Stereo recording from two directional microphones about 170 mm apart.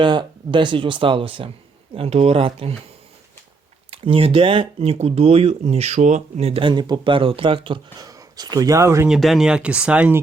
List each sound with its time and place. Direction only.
0.0 s speech: 30° right (ahead or behind)
3.9 s speech: 35° right (ahead or behind); by 9.0 s 15° right (ahead or behind)
9.0 s speech: centre (ahead or behind)